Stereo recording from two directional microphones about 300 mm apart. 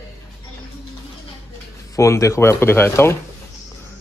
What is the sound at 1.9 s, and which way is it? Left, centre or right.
Speech, centre.